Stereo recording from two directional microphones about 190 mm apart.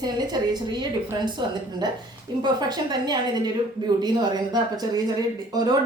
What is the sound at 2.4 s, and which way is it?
Speech, 20° right (ahead or behind).